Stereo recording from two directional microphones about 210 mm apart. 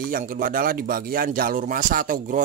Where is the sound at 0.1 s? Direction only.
40° right (ahead or behind).